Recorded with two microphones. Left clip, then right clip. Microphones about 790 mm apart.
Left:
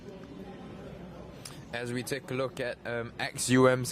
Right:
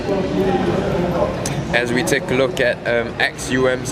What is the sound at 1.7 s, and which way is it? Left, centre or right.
Speech, left.